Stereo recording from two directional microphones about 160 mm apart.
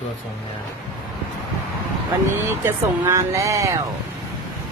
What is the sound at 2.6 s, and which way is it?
Speech, 15° right (ahead or behind).